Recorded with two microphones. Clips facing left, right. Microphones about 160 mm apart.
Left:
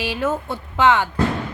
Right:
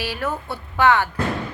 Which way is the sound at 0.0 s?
20° left (ahead or behind).